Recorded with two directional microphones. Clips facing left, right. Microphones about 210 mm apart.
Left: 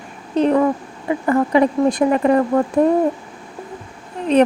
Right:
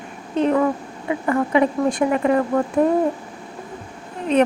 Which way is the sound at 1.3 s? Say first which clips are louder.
Left 3 dB; 35° left (ahead or behind).